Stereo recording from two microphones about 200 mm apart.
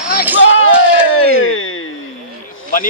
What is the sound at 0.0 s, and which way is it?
Basketball bounce, 10° right (ahead or behind).